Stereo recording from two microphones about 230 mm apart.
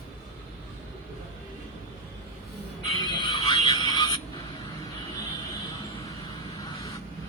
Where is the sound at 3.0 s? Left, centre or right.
Centre.